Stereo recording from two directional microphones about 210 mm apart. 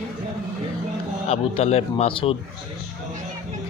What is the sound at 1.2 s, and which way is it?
Speech, 30° left (ahead or behind).